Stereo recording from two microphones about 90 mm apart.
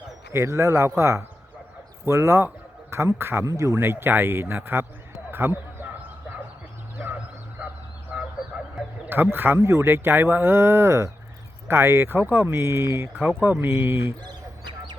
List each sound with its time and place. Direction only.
0.3 s speech: 35° right (ahead or behind)
5.3 s a sound: 25° right (ahead or behind)
7.6 s fowl: 15° right (ahead or behind)
8.1 s a sound: 10° right (ahead or behind)
9.0 s speech: 25° right (ahead or behind)
13.1 s speech: 20° right (ahead or behind)